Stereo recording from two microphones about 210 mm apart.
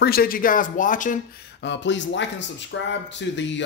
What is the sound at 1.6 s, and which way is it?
A man's voice, 60° left (ahead or behind).